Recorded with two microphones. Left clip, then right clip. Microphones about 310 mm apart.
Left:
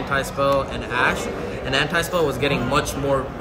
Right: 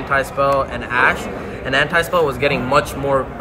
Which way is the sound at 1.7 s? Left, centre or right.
Centre.